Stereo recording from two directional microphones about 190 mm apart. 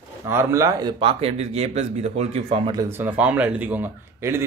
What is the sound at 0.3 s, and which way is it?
Speech, 15° right (ahead or behind).